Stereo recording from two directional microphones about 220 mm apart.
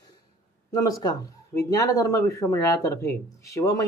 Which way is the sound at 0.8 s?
15° left (ahead or behind).